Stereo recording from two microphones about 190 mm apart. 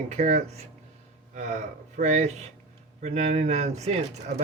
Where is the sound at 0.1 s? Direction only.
35° right (ahead or behind).